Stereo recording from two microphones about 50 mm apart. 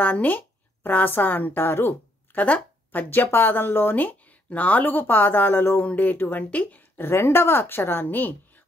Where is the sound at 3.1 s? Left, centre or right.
Left.